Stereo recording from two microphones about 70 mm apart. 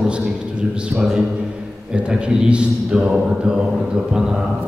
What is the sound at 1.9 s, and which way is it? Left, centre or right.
A man's voice, centre.